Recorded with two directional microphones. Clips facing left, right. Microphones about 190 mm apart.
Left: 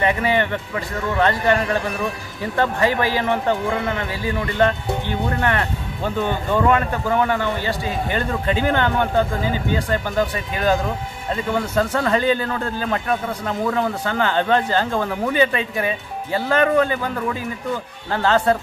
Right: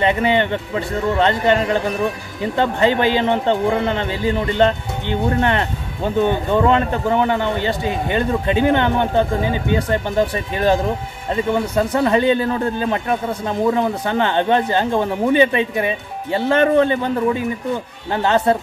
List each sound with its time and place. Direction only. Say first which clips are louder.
0.0 s a man's voice: right 3 dB; 25° right (ahead or behind)
11.5 s a man's voice: right 1 dB; 15° right (ahead or behind)